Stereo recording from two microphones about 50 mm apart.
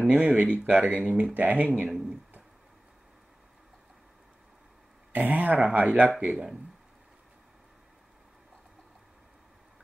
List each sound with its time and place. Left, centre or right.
0.0 s speech: centre
5.1 s speech: right
6.2 s speech: centre